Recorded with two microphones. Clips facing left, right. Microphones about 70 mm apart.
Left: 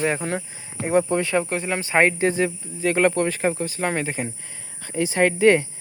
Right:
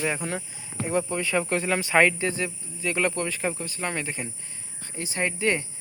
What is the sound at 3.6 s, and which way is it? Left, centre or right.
Speech, left.